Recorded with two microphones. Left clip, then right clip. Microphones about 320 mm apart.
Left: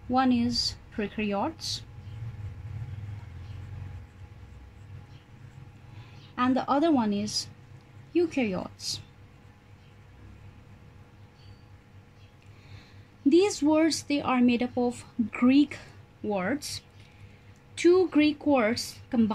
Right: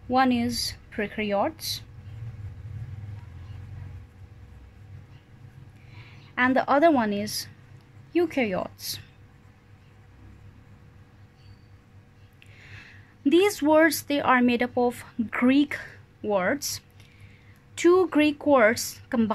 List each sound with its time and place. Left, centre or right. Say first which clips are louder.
0.1 s speech: right 3 dB; right
6.3 s speech: right 4 dB; right
13.3 s speech: right 3 dB; right